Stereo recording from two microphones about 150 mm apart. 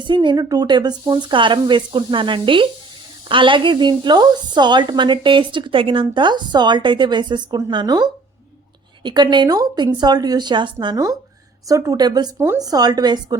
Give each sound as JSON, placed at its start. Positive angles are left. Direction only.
{"t": 0.0, "sound": "a woman's voice", "side_deg": -30}
{"t": 9.0, "sound": "a woman's voice", "side_deg": -30}